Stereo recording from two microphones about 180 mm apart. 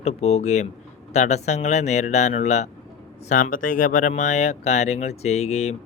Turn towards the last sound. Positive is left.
turn(degrees=35)  # may be behind; listen again after turning